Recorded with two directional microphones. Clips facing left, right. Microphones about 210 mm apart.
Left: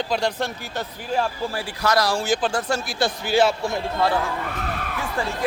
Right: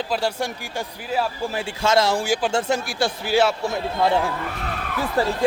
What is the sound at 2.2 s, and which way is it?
Speech, 10° right (ahead or behind).